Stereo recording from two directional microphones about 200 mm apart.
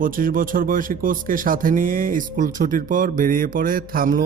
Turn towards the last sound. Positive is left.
turn(degrees=-45)  # may be behind; listen again after turning